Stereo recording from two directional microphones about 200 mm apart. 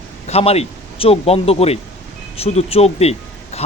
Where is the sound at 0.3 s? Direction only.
30° left (ahead or behind).